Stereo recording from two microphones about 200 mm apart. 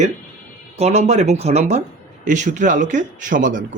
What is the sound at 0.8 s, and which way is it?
Speech, 35° right (ahead or behind).